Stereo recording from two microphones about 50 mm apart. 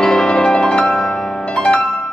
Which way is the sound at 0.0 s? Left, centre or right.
Centre.